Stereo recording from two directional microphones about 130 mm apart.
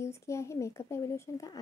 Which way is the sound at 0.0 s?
20° left (ahead or behind).